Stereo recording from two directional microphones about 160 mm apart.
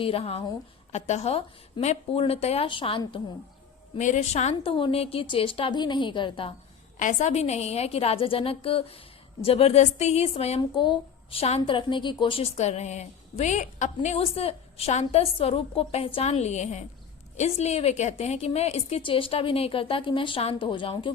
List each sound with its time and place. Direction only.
0.0 s a woman's voice: 35° left (ahead or behind)
3.9 s a woman's voice: 50° left (ahead or behind); by 6.5 s 30° left (ahead or behind)
7.0 s a woman's voice: 50° left (ahead or behind); by 21.1 s 30° left (ahead or behind)